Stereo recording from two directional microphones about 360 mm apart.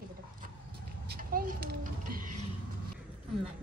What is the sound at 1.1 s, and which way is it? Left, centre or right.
Speech, right.